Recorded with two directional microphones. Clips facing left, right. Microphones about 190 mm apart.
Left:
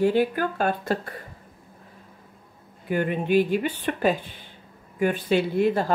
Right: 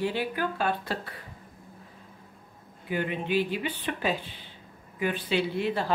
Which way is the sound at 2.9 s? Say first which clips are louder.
Left 6 dB; 50° left (ahead or behind).